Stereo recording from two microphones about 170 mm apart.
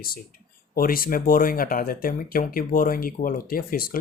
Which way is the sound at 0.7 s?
60° left (ahead or behind).